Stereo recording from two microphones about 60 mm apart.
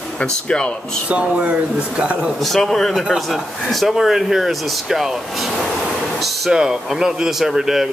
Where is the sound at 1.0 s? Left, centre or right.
Right.